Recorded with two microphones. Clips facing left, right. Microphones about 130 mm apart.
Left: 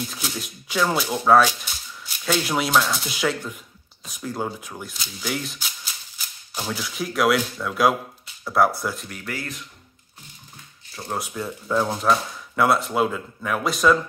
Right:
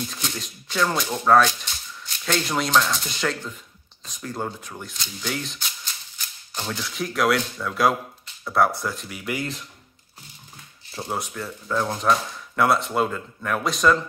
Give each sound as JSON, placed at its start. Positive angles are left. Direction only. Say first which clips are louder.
{"t": 0.1, "sound": "speech", "louder": "left 1 dB", "side_deg": 5}
{"t": 9.2, "sound": "speech", "louder": "right 5 dB", "side_deg": -15}
{"t": 11.0, "sound": "speech", "louder": "right 2 dB", "side_deg": -25}
{"t": 11.3, "sound": "speech", "louder": "left 5 dB", "side_deg": 15}